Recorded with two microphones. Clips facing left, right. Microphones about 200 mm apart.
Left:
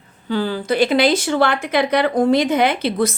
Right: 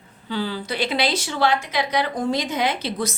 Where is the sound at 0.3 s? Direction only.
50° left (ahead or behind).